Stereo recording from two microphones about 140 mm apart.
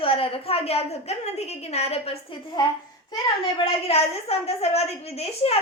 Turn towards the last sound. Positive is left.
turn(degrees=45)  # may be behind; listen again after turning